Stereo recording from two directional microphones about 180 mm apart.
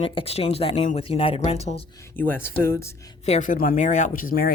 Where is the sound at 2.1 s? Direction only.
10° left (ahead or behind).